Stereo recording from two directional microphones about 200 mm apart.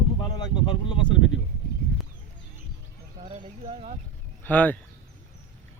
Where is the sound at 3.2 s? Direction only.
35° right (ahead or behind).